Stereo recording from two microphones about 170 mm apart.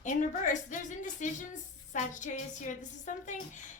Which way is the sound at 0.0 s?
45° left (ahead or behind).